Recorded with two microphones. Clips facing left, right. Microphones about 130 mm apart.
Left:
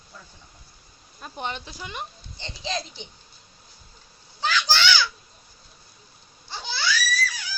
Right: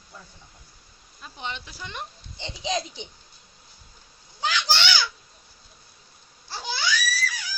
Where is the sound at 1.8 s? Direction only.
10° left (ahead or behind).